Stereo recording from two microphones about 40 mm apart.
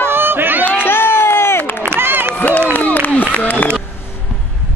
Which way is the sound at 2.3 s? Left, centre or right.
Left.